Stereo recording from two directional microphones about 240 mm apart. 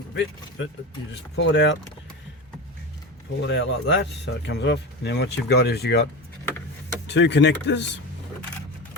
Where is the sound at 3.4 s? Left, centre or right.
Left.